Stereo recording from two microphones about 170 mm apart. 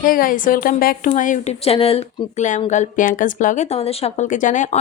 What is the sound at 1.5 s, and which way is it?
A woman's voice, 35° left (ahead or behind).